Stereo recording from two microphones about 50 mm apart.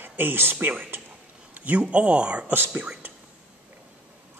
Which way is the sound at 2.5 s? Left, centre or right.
Right.